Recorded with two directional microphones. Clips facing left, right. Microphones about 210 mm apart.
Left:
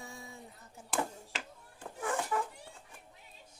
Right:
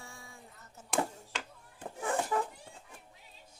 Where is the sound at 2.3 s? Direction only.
30° right (ahead or behind).